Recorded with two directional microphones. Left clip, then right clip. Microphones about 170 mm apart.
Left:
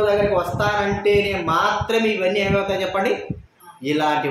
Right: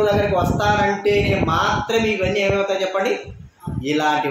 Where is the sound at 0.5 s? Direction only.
Centre (ahead or behind).